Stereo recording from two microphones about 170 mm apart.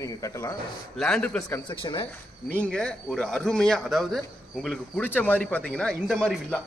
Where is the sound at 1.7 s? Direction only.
30° left (ahead or behind).